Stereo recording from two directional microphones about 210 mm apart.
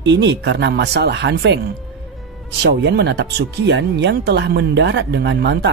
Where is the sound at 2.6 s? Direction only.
55° right (ahead or behind).